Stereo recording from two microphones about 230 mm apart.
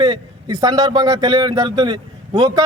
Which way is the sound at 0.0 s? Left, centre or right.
Centre.